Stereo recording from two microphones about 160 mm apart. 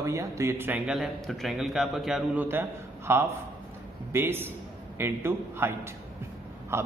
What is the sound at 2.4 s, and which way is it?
A man's voice, 15° right (ahead or behind).